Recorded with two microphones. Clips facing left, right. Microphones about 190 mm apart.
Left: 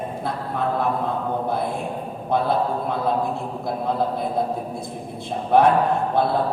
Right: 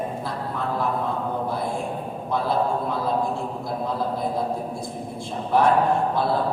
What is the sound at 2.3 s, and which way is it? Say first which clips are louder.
Mantra: left 2 dB; 60° left (ahead or behind).